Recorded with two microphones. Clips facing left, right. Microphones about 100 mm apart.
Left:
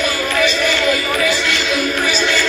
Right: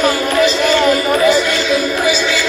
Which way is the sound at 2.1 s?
5° right (ahead or behind).